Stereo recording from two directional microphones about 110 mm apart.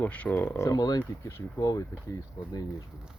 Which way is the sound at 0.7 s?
35° left (ahead or behind).